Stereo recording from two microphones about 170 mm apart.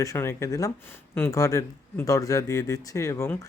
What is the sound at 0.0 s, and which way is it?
Speech, 20° left (ahead or behind).